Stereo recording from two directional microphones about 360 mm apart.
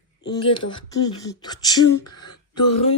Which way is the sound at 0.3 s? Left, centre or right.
Centre.